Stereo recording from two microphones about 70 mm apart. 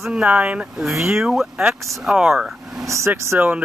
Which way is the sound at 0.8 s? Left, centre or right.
Centre.